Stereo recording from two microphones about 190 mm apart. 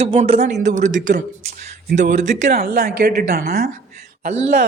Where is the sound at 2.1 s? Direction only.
40° right (ahead or behind).